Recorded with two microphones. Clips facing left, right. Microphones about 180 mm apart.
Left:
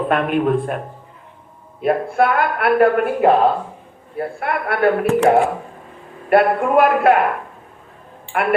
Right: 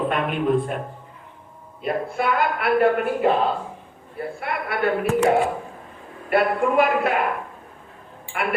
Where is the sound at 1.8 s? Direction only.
55° left (ahead or behind).